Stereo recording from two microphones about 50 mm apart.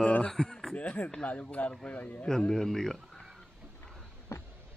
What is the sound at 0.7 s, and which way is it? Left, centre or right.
Speech, left.